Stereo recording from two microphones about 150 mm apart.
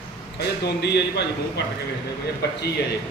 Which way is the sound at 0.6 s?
90° left.